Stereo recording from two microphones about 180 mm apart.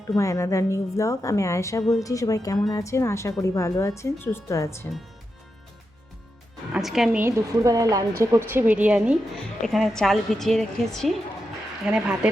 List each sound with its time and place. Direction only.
0.2 s a woman's voice: 15° left (ahead or behind)
6.7 s a woman's voice: centre (ahead or behind)